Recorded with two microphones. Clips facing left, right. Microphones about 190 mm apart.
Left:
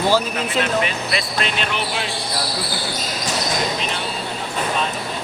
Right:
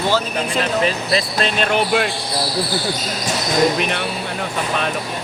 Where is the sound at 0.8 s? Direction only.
35° right (ahead or behind); by 2.1 s 50° right (ahead or behind).